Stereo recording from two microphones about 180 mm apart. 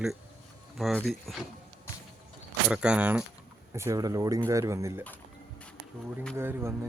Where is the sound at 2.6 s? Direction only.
5° right (ahead or behind).